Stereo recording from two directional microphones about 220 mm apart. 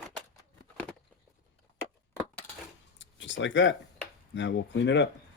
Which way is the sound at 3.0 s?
55° left (ahead or behind).